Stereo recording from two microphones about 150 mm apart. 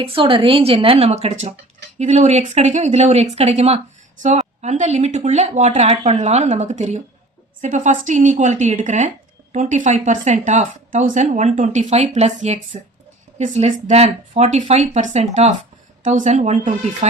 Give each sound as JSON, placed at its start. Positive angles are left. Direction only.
{"t": 0.0, "sound": "a woman's voice", "side_deg": -35}